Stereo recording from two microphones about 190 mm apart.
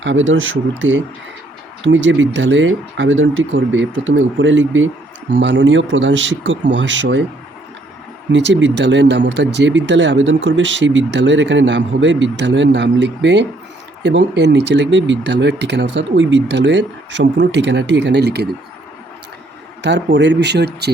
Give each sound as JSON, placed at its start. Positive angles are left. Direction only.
{"t": 0.0, "sound": "speech", "side_deg": -85}
{"t": 0.8, "sound": "speech", "side_deg": -75}
{"t": 5.3, "sound": "speech", "side_deg": -70}
{"t": 8.3, "sound": "speech", "side_deg": -70}
{"t": 19.8, "sound": "speech", "side_deg": -65}